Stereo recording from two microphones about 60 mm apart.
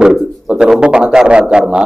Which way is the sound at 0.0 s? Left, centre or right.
Centre.